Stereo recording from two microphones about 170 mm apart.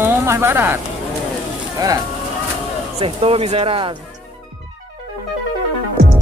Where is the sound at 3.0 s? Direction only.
35° right (ahead or behind).